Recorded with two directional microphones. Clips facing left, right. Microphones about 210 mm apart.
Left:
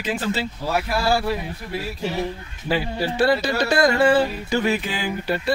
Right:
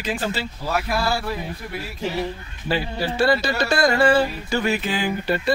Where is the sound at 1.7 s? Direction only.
30° left (ahead or behind).